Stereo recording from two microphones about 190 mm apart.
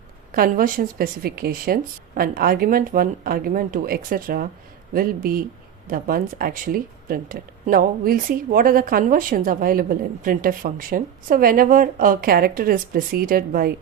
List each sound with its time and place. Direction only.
0.3 s speech: 50° right (ahead or behind)